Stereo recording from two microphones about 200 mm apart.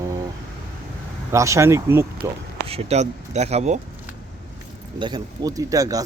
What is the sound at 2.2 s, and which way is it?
Speech, 30° right (ahead or behind).